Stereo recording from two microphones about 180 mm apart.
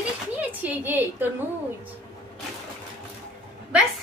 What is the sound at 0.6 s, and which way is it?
Speech, 10° right (ahead or behind).